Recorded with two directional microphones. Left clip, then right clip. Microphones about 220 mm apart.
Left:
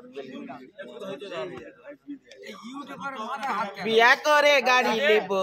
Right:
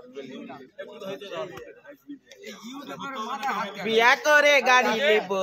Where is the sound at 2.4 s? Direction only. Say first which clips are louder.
Even; 15° left (ahead or behind).